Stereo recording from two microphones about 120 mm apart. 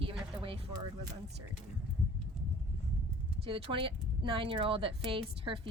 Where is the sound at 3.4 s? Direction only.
50° right (ahead or behind).